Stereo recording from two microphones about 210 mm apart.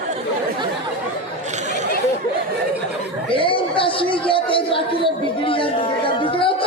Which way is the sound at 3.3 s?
25° left (ahead or behind).